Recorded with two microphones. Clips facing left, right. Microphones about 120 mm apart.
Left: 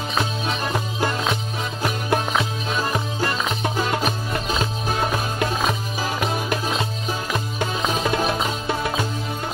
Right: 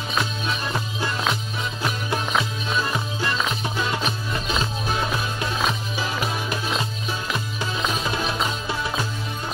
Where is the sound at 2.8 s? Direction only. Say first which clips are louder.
Left 2 dB; 45° left (ahead or behind).